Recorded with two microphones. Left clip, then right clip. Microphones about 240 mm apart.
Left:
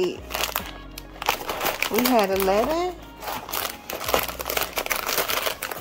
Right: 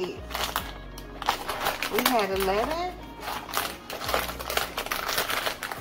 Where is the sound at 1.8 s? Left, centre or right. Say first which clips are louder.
Left 4 dB; left.